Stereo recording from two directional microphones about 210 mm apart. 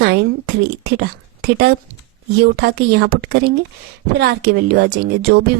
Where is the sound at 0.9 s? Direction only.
50° right (ahead or behind).